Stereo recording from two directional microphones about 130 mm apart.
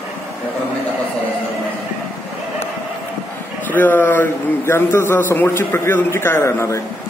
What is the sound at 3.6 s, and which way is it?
A man's voice, 15° left (ahead or behind).